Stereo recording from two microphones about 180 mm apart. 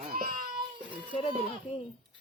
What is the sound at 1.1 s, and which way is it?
Speech, 30° left (ahead or behind).